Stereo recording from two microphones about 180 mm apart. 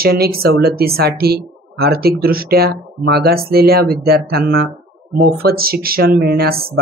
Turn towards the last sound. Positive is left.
turn(degrees=-55)  # may be behind; listen again after turning